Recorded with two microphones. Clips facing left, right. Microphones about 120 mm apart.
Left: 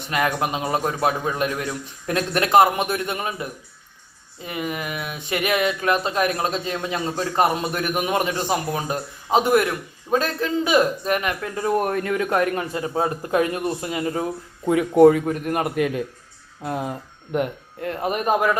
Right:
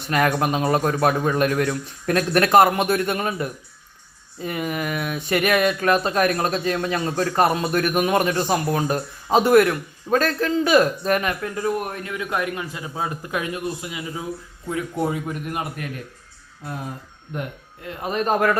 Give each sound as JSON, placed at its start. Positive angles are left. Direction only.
{"t": 0.4, "sound": "a man's voice", "side_deg": 20}
{"t": 5.4, "sound": "a man's voice", "side_deg": 20}
{"t": 11.9, "sound": "a man's voice", "side_deg": 55}
{"t": 15.3, "sound": "speech", "side_deg": 55}
{"t": 16.6, "sound": "speech", "side_deg": 85}
{"t": 17.3, "sound": "speech", "side_deg": 70}
{"t": 18.0, "sound": "speech", "side_deg": 15}